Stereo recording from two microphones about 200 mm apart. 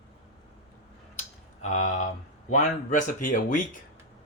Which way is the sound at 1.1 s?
40° left (ahead or behind).